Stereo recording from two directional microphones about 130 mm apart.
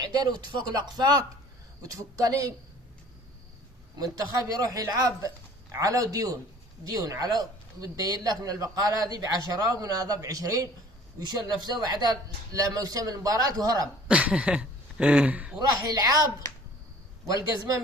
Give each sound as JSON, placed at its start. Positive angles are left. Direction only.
{"t": 0.0, "sound": "speech", "side_deg": -30}
{"t": 4.6, "sound": "speech", "side_deg": -25}
{"t": 13.8, "sound": "speech", "side_deg": -10}
{"t": 15.5, "sound": "speech", "side_deg": -35}
{"t": 17.2, "sound": "speech", "side_deg": -25}